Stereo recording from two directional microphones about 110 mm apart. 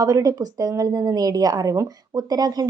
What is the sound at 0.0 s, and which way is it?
A woman's voice, 35° right (ahead or behind).